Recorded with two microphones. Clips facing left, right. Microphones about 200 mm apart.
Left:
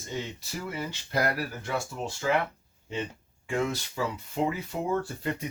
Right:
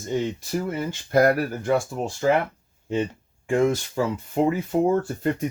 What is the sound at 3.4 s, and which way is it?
Speech, 50° right (ahead or behind).